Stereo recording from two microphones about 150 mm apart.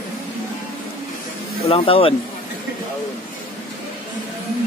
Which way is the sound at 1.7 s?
40° left (ahead or behind).